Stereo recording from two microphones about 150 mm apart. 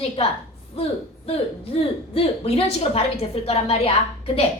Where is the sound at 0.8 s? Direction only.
40° left (ahead or behind).